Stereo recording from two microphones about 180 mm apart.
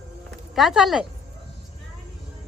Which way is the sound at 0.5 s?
Centre (ahead or behind).